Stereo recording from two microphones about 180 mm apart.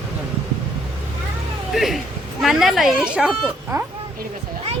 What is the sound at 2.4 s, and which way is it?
A woman's voice, centre (ahead or behind).